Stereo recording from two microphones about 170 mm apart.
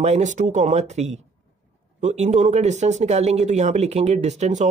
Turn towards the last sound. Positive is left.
turn(degrees=-45)  # may be behind; listen again after turning